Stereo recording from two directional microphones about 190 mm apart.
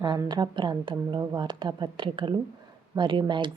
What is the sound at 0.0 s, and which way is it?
A woman's voice, 25° right (ahead or behind).